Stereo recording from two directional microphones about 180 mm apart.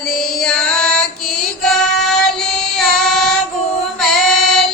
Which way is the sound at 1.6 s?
5° left (ahead or behind).